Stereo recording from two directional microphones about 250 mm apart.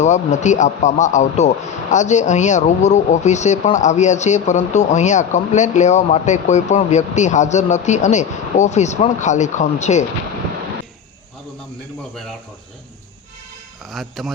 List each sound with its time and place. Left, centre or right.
0.0 s a man's voice: left
13.9 s speech: centre